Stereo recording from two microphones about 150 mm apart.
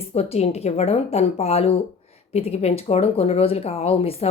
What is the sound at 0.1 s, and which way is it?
Speech, 40° left (ahead or behind).